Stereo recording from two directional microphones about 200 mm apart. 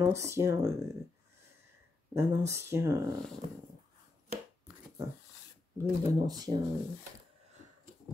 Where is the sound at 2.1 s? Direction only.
15° right (ahead or behind).